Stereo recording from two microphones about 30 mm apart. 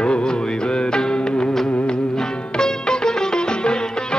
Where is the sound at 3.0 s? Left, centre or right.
Centre.